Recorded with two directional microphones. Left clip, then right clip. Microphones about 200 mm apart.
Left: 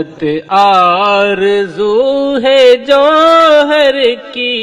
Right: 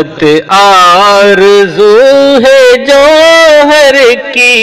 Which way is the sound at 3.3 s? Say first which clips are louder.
Right 4 dB; 15° right (ahead or behind).